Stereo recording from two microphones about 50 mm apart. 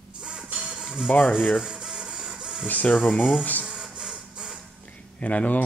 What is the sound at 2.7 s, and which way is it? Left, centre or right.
Speech, left.